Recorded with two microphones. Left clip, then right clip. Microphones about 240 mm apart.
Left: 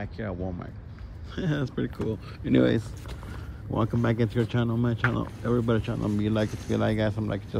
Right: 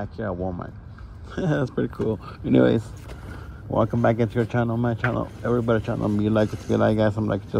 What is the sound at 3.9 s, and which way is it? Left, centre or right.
Speech, centre.